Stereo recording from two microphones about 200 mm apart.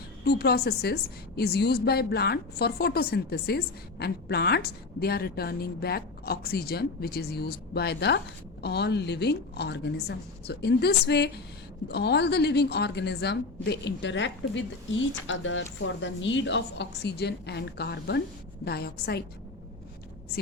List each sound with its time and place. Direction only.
0.3 s a woman's voice: 55° left (ahead or behind)